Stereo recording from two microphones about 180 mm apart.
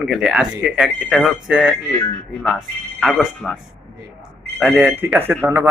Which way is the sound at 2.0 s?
5° left (ahead or behind).